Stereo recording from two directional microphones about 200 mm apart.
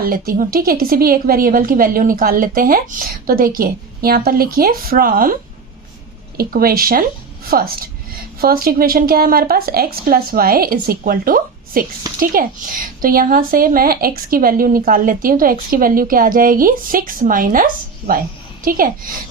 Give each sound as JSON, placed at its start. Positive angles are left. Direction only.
{"t": 0.0, "sound": "a woman's voice", "side_deg": -45}